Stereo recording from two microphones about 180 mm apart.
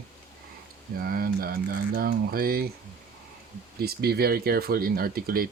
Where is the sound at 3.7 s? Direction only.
60° right (ahead or behind).